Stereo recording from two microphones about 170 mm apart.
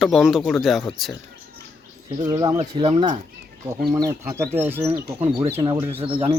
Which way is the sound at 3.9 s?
15° right (ahead or behind).